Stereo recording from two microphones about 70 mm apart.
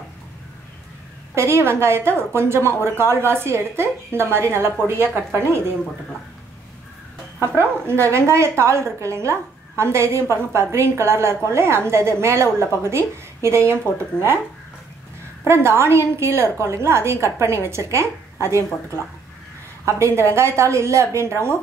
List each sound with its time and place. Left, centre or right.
1.3 s a woman's voice: right
7.3 s a woman's voice: right
15.4 s a woman's voice: right
19.8 s a woman's voice: right